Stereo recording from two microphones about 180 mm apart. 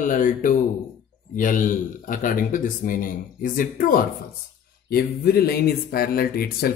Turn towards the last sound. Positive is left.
turn(degrees=55)  # may be behind; listen again after turning